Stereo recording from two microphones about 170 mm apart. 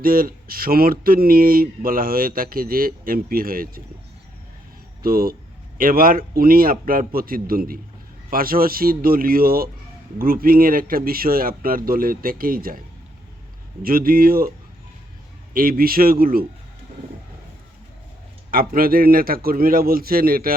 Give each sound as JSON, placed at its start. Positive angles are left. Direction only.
{"t": 0.0, "sound": "speech", "side_deg": -55}
{"t": 5.0, "sound": "speech", "side_deg": -60}
{"t": 13.8, "sound": "speech", "side_deg": -60}
{"t": 15.5, "sound": "speech", "side_deg": -55}
{"t": 18.5, "sound": "speech", "side_deg": -55}